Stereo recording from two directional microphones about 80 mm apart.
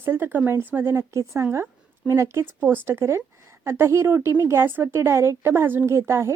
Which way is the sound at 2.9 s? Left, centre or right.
Right.